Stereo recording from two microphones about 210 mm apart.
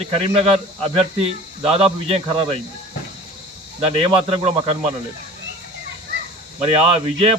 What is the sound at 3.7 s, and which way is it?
Speech, 30° right (ahead or behind).